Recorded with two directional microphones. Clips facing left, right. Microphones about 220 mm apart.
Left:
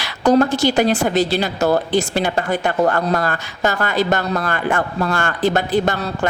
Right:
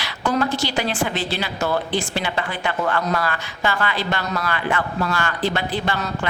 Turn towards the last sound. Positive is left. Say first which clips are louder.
# left 6 dB
turn(degrees=45)  # may be behind; listen again after turning